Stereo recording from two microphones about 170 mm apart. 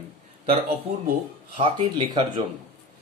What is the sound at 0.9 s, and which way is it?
Speech, 35° right (ahead or behind).